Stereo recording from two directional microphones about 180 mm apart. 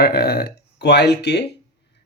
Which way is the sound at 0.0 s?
60° left (ahead or behind).